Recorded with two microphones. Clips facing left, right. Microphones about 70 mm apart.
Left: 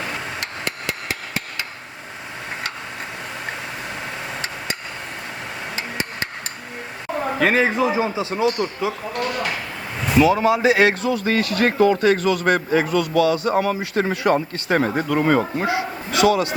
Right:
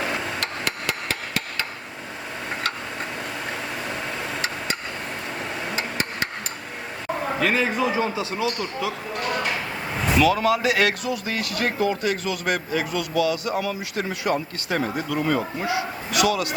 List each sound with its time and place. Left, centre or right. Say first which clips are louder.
7.4 s speech: left 5 dB; left
10.2 s speech: left 4 dB; left
15.6 s speech: left 3 dB; left